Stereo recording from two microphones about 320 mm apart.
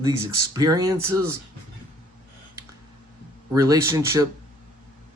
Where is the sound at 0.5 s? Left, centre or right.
Centre.